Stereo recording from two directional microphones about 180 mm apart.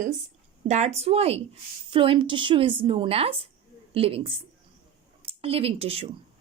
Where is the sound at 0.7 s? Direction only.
35° right (ahead or behind).